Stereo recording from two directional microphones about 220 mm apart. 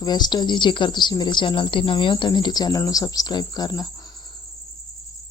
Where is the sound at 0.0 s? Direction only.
20° left (ahead or behind).